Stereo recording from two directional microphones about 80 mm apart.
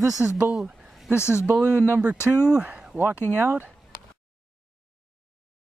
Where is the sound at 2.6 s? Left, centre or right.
Centre.